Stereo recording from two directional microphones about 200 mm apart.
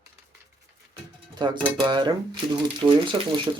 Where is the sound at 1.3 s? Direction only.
20° right (ahead or behind).